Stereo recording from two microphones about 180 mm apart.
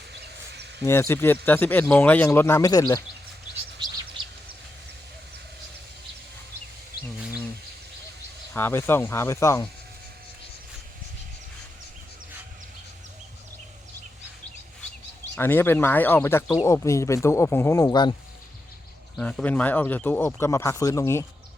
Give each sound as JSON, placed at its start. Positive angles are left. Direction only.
{"t": 0.1, "sound": "a sound", "side_deg": -70}
{"t": 0.8, "sound": "speech", "side_deg": 15}
{"t": 8.5, "sound": "speech", "side_deg": 15}
{"t": 15.4, "sound": "speech", "side_deg": 10}
{"t": 19.1, "sound": "speech", "side_deg": 5}